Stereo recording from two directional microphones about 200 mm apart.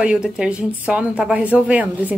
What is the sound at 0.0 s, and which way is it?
A woman's voice, 5° right (ahead or behind).